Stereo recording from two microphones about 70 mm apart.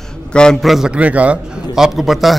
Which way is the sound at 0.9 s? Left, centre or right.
Centre.